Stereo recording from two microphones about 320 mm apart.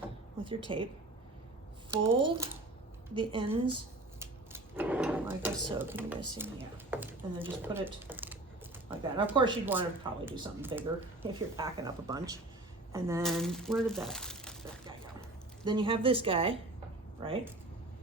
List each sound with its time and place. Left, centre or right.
0.4 s speech: centre
1.9 s speech: centre
4.2 s drawer open or close: centre
6.4 s speech: centre
15.6 s speech: centre